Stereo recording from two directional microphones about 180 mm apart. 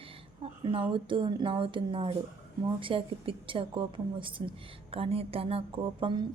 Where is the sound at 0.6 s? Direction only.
30° right (ahead or behind).